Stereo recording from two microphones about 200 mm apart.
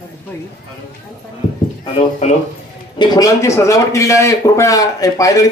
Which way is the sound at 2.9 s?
20° left (ahead or behind).